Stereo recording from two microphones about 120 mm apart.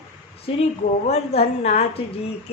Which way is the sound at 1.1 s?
60° left (ahead or behind).